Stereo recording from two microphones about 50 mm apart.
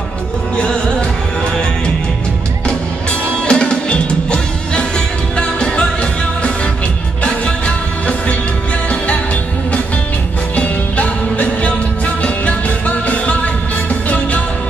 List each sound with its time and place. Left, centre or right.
0.6 s music: centre
3.1 s music: centre
7.2 s music: left
10.5 s music: left